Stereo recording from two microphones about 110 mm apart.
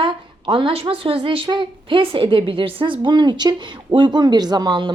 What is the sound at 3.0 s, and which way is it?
Speech, 40° right (ahead or behind).